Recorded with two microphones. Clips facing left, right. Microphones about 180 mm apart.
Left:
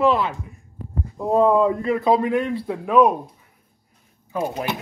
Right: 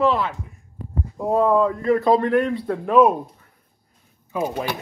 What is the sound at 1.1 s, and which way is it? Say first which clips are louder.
Speech: left 2 dB; 5° right (ahead or behind).